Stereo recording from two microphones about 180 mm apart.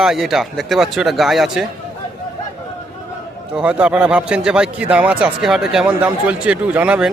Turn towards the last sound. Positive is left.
turn(degrees=-5)  # may be behind; listen again after turning